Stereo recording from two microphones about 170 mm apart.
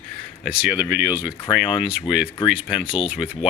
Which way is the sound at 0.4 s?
5° right (ahead or behind).